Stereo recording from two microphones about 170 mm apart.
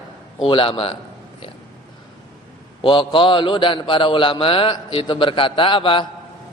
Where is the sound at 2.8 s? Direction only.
30° left (ahead or behind).